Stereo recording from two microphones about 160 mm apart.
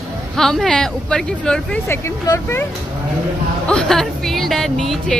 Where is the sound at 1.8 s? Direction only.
15° left (ahead or behind).